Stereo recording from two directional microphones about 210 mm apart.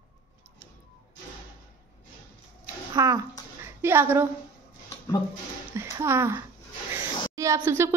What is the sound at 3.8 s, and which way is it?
Speech, 10° right (ahead or behind).